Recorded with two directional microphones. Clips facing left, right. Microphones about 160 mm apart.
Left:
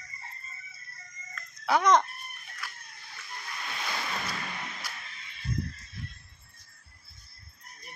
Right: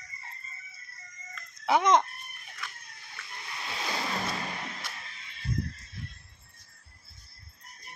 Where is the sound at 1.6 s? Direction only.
20° right (ahead or behind).